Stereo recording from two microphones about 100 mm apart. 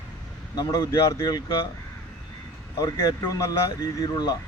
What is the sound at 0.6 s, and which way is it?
Speech, 40° left (ahead or behind).